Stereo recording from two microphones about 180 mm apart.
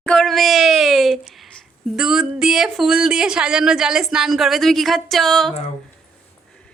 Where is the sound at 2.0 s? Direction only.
5° right (ahead or behind).